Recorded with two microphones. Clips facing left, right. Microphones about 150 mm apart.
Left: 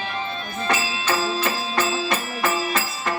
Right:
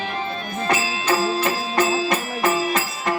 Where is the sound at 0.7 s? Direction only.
20° right (ahead or behind).